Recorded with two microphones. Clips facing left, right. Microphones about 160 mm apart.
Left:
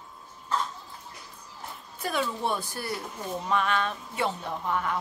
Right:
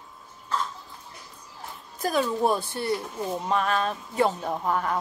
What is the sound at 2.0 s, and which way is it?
Music, 40° right (ahead or behind).